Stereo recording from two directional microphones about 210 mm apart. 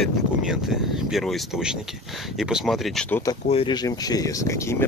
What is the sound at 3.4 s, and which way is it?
Speech, 25° left (ahead or behind).